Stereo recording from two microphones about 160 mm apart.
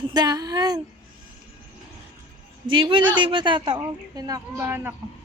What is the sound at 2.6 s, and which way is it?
A woman's voice, 30° right (ahead or behind).